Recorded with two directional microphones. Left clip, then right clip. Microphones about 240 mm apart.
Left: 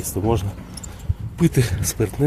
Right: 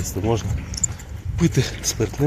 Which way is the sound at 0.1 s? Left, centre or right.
Centre.